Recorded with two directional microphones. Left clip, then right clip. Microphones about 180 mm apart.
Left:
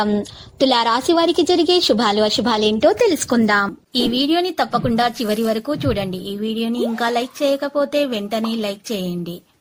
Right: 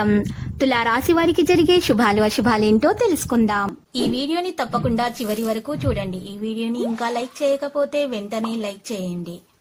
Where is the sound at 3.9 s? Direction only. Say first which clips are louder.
Left 6 dB; 25° left (ahead or behind).